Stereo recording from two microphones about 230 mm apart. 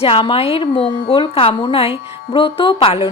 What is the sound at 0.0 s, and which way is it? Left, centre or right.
A woman's voice, left.